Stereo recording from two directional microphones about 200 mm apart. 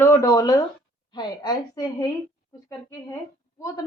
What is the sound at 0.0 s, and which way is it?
A woman's voice, 15° left (ahead or behind).